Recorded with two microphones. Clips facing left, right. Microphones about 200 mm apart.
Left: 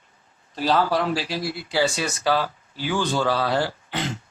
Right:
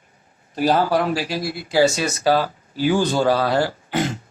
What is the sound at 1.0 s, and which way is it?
Speech, 15° right (ahead or behind).